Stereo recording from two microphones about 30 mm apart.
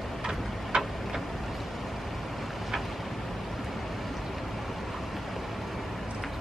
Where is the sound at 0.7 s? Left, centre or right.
Right.